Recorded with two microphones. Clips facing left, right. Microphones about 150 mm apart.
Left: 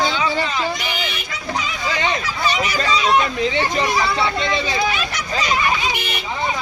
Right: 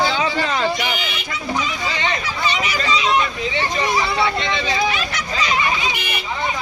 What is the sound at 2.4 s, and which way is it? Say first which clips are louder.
Speech: left 2 dB; 45° left (ahead or behind).